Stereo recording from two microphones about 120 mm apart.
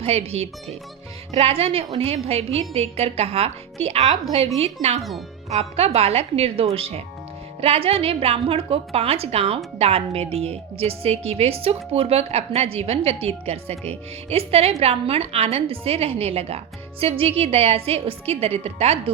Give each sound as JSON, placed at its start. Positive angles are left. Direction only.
{"t": 0.0, "sound": "speech", "side_deg": -55}